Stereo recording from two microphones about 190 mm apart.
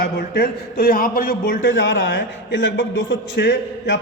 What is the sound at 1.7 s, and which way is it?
A man's voice, 70° left (ahead or behind).